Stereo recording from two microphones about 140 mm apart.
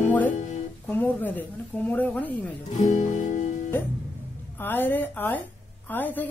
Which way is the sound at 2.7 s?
65° left (ahead or behind).